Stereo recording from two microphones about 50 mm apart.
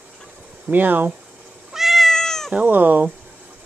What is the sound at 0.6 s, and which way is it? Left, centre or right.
Speech, right.